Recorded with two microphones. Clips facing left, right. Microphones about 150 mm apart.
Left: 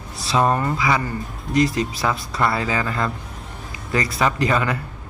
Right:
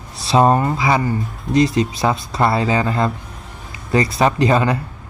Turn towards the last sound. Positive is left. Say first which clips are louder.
# right 5 dB
turn(degrees=-25)  # may be behind; listen again after turning